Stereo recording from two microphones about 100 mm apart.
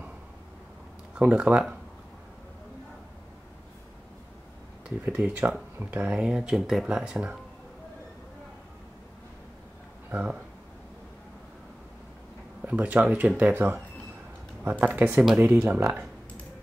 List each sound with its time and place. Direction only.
1.1 s speech: 10° right (ahead or behind)
5.0 s speech: 15° right (ahead or behind)
10.1 s speech: 10° right (ahead or behind)
12.6 s speech: 15° right (ahead or behind)